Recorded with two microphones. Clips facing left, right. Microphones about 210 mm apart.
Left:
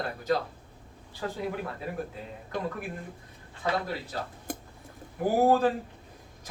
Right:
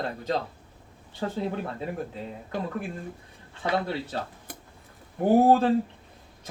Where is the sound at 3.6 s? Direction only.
30° right (ahead or behind).